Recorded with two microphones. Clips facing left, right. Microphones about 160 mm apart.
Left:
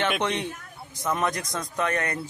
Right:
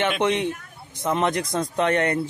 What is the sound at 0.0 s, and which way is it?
A man's voice, 20° right (ahead or behind).